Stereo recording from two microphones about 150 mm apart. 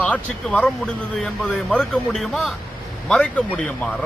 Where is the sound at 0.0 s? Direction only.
10° left (ahead or behind).